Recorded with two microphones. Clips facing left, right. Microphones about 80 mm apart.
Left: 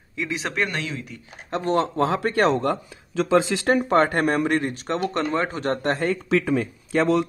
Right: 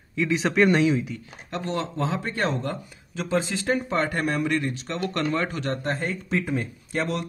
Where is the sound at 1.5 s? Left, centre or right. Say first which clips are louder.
Left 6 dB; left.